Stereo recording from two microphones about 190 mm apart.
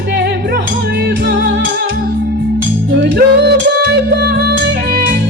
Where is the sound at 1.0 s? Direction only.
65° right (ahead or behind).